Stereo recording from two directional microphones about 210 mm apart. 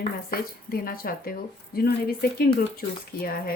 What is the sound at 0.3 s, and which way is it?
Speech, 45° left (ahead or behind).